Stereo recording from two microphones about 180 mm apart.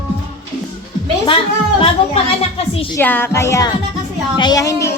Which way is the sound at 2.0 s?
30° left (ahead or behind).